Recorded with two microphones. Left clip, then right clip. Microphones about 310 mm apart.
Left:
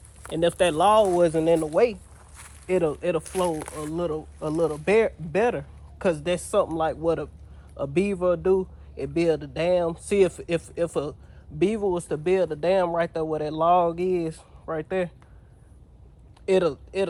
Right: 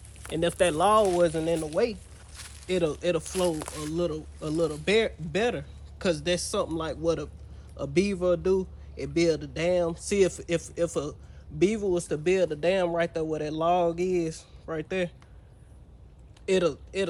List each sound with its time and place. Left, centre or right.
0.2 s speech: centre
16.5 s speech: centre